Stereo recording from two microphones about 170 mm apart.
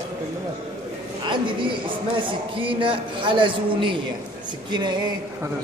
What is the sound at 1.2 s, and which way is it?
A man's voice, 30° right (ahead or behind).